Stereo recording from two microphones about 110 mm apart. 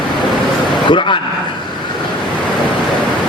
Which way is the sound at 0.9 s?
50° left (ahead or behind).